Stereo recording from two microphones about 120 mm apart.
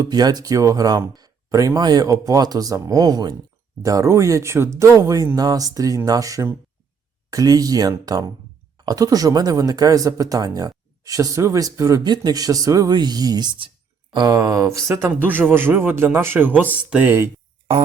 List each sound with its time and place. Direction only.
0.0 s speech: 35° right (ahead or behind); by 17.2 s 15° right (ahead or behind)